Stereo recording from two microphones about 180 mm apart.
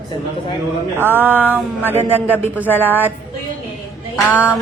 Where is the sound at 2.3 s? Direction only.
10° left (ahead or behind).